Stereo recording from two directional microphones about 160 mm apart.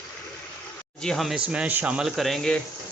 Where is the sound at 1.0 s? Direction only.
Centre (ahead or behind).